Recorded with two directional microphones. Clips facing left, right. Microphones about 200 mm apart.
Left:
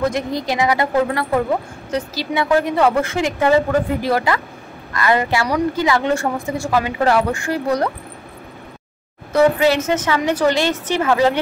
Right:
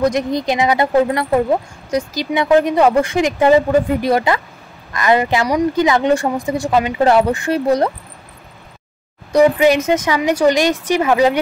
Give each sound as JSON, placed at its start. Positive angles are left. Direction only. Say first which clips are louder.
{"t": 0.0, "sound": "a woman's voice", "louder": "right 4 dB", "side_deg": -20}
{"t": 9.3, "sound": "a woman's voice", "louder": "right 3 dB", "side_deg": -15}